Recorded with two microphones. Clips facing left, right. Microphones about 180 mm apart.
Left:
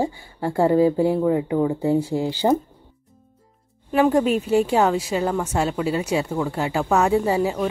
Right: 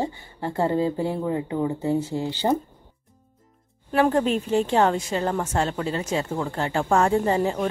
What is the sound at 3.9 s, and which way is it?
Speech, 10° left (ahead or behind).